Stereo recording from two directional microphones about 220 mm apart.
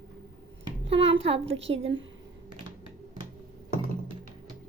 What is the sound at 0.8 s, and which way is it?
Speech, 25° right (ahead or behind).